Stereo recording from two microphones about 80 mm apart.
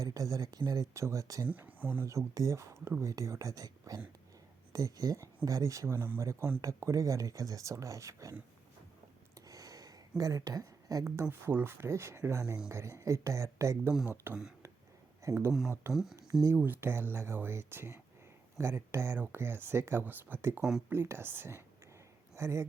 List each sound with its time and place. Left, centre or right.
0.0 s speech: right
1.5 s speech: right
2.0 s speech: right
6.0 s speech: right
9.5 s a sound: right
11.0 s speech: right
14.3 s speech: right
15.9 s speech: centre
16.6 s speech: right